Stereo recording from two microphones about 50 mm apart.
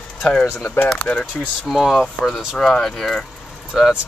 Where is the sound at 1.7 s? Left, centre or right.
Centre.